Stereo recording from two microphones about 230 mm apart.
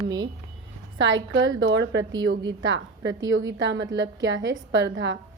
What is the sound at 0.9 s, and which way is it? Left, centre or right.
A woman's voice, right.